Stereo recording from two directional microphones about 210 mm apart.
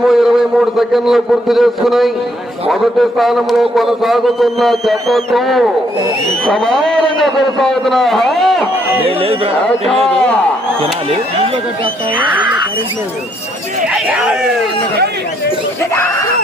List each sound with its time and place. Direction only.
0.1 s a man's voice: centre (ahead or behind)
9.0 s speech: 25° right (ahead or behind)
12.1 s speech: 5° right (ahead or behind)
13.9 s speech: 5° right (ahead or behind)